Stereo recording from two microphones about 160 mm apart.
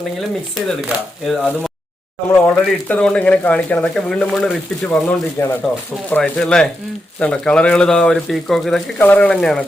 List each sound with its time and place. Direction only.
0.2 s speech: centre (ahead or behind)
5.4 s speech: 15° left (ahead or behind)